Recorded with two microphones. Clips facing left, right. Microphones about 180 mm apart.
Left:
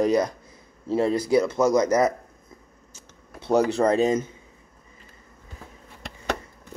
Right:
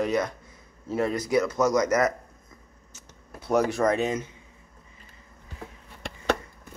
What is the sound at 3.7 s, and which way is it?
Speech, 30° left (ahead or behind).